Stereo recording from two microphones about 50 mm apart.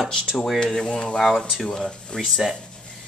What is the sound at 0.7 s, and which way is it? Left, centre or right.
Speech, centre.